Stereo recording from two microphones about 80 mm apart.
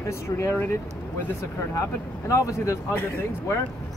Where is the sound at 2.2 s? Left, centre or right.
Left.